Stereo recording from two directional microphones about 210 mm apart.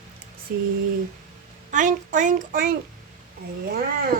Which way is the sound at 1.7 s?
35° right (ahead or behind).